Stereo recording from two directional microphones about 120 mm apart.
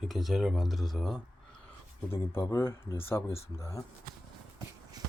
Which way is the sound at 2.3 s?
20° left (ahead or behind).